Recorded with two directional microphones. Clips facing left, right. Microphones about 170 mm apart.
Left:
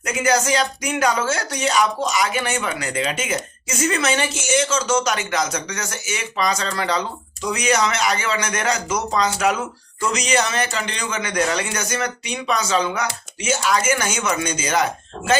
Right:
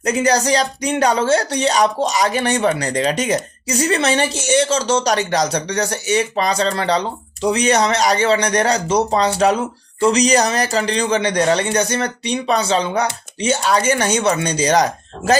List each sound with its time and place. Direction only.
0.0 s speech: 35° right (ahead or behind)